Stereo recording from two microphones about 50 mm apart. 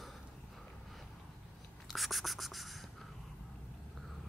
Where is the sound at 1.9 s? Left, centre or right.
Centre.